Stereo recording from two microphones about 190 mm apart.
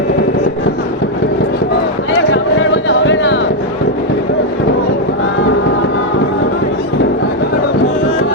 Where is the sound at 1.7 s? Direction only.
70° left (ahead or behind).